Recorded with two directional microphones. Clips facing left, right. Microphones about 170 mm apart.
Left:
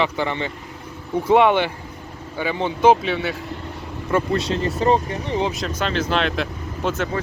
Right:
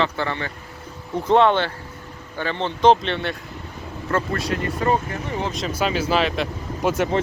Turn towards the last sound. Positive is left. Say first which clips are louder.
# right 2 dB
turn(degrees=-10)  # may be behind; listen again after turning